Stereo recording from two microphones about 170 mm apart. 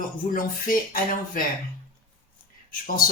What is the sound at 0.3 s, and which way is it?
Speech, 55° left (ahead or behind).